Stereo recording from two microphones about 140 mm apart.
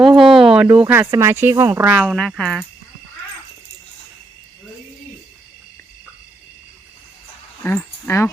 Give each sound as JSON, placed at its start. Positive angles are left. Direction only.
{"t": 0.2, "sound": "speech", "side_deg": 0}
{"t": 1.9, "sound": "a woman's voice", "side_deg": -5}
{"t": 7.6, "sound": "speech", "side_deg": 15}